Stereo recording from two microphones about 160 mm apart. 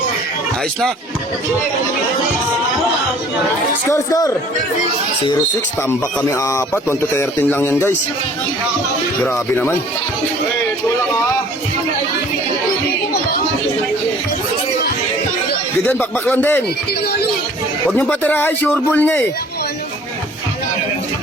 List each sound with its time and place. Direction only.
3.8 s speech: 20° left (ahead or behind)
5.9 s speech: 20° left (ahead or behind)
9.2 s speech: 10° left (ahead or behind)
15.9 s speech: 10° left (ahead or behind)
17.9 s speech: 10° left (ahead or behind)